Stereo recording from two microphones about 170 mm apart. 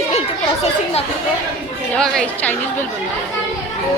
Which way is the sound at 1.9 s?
5° left (ahead or behind).